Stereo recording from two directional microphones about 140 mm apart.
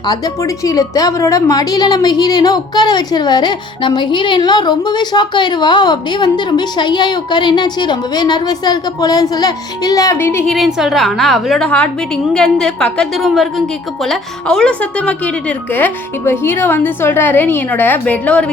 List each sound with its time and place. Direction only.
0.0 s a woman's voice: 25° left (ahead or behind)
10.4 s a woman's voice: centre (ahead or behind)